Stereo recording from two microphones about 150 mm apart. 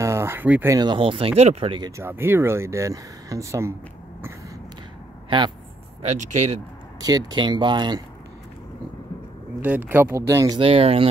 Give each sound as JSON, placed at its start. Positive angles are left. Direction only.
{"t": 0.0, "sound": "a sound", "side_deg": -20}
{"t": 0.7, "sound": "speech", "side_deg": -35}
{"t": 2.0, "sound": "speech", "side_deg": -15}
{"t": 6.0, "sound": "speech", "side_deg": -55}
{"t": 7.0, "sound": "speech", "side_deg": -25}
{"t": 9.6, "sound": "speech", "side_deg": -10}